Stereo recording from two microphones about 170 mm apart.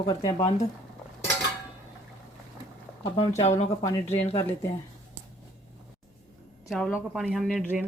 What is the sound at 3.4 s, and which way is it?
Speech, 40° left (ahead or behind).